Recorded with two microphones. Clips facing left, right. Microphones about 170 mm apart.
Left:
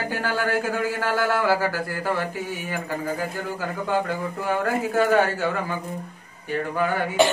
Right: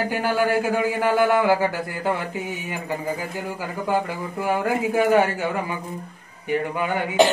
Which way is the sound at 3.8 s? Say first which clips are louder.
Right 1 dB; 10° right (ahead or behind).